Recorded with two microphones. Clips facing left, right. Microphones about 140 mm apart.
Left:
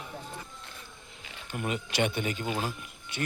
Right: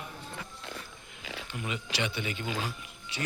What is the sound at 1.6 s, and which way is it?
Speech, 50° left (ahead or behind).